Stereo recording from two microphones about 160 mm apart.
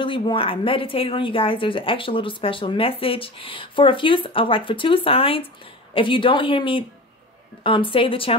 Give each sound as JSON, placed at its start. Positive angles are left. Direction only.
{"t": 0.0, "sound": "a woman's voice", "side_deg": 30}